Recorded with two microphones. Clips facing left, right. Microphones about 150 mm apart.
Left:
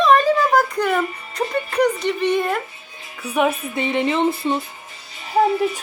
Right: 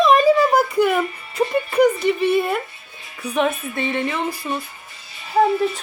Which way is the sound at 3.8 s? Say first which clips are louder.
Left 6 dB; 20° left (ahead or behind).